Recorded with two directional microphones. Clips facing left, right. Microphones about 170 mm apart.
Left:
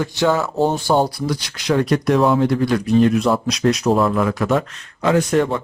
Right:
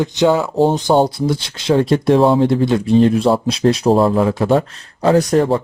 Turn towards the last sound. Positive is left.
turn(degrees=-35)  # may be behind; listen again after turning